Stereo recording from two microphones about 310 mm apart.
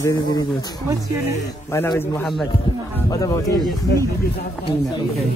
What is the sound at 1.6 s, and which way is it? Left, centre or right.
Speech, centre.